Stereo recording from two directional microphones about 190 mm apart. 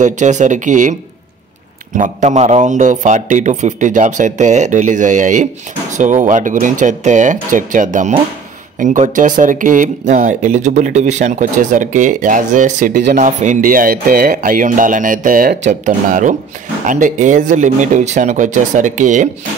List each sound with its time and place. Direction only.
0.0 s a man's voice: 40° right (ahead or behind)
2.0 s a man's voice: 35° right (ahead or behind)